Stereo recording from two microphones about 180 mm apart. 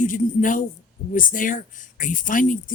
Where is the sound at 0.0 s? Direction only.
45° left (ahead or behind).